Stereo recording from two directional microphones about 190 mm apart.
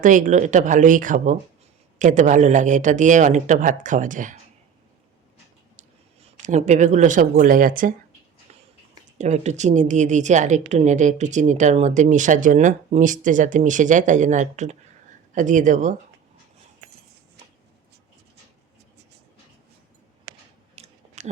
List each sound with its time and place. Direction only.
0.0 s a woman's voice: 40° right (ahead or behind)
6.2 s a woman's voice: 40° right (ahead or behind)
9.1 s a woman's voice: 35° right (ahead or behind)
20.7 s chewing: 35° right (ahead or behind)